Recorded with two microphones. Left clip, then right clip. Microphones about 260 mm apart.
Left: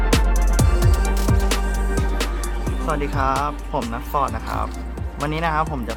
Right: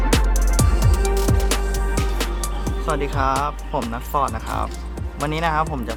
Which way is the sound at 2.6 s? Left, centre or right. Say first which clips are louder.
Right 1 dB; centre.